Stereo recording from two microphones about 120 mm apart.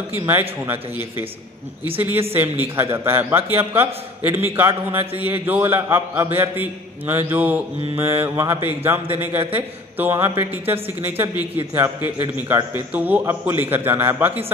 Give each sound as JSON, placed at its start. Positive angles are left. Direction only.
{"t": 0.3, "sound": "a man's voice", "side_deg": -15}
{"t": 2.3, "sound": "a man's voice", "side_deg": -15}
{"t": 7.9, "sound": "mantra", "side_deg": -20}
{"t": 8.6, "sound": "a man's voice", "side_deg": -20}
{"t": 11.5, "sound": "mantra", "side_deg": -20}
{"t": 12.7, "sound": "a man's voice", "side_deg": -15}